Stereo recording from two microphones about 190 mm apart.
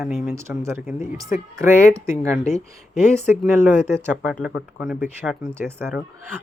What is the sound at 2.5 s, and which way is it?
Speech, 35° left (ahead or behind).